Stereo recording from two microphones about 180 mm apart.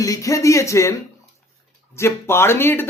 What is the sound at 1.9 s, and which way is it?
Speech, 15° left (ahead or behind).